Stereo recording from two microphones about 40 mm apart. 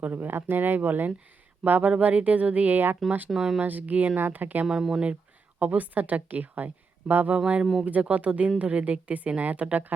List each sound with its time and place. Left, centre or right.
0.1 s a woman's voice: right
2.0 s a woman's voice: right
3.2 s speech: centre
3.6 s a woman's voice: right
4.6 s speech: centre
5.5 s a woman's voice: right
7.3 s speech: right
8.1 s a woman's voice: right